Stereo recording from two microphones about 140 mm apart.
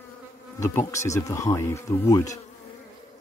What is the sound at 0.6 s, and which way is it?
Speech, 20° left (ahead or behind).